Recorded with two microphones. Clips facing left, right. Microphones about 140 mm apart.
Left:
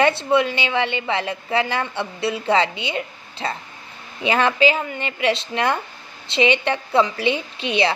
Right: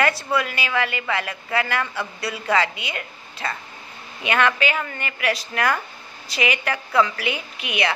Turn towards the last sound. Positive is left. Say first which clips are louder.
# left 4 dB
turn(degrees=30)  # may be behind; listen again after turning